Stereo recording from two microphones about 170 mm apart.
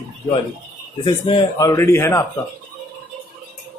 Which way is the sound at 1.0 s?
30° left (ahead or behind).